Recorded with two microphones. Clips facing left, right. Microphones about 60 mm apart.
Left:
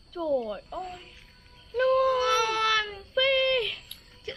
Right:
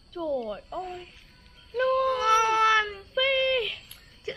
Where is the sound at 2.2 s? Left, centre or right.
Centre.